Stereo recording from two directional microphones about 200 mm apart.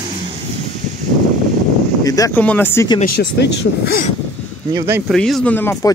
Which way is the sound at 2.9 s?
50° left (ahead or behind).